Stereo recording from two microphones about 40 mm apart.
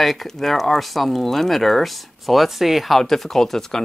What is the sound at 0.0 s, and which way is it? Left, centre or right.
Speech, centre.